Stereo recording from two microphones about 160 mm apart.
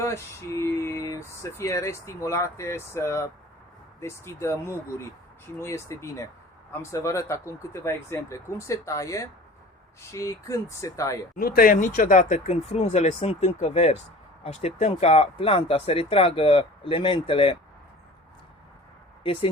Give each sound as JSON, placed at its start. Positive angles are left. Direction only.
{"t": 0.0, "sound": "speech", "side_deg": 15}
{"t": 11.3, "sound": "speech", "side_deg": 65}
{"t": 19.2, "sound": "speech", "side_deg": 35}